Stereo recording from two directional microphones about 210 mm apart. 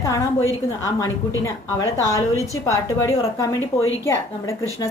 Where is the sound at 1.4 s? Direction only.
15° left (ahead or behind).